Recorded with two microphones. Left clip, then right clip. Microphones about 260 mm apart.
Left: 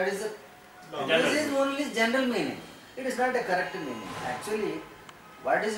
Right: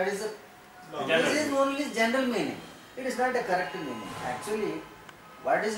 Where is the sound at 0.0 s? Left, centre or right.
Centre.